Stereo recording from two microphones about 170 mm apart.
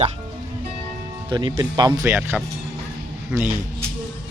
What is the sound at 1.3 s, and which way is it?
Speech, 25° right (ahead or behind).